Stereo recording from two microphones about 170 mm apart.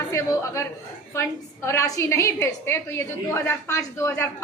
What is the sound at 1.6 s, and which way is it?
A woman's voice, 20° left (ahead or behind).